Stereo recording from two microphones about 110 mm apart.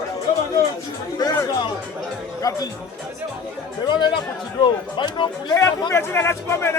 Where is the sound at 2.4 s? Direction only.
35° left (ahead or behind).